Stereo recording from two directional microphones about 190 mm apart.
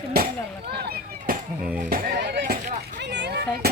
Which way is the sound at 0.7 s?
55° right (ahead or behind).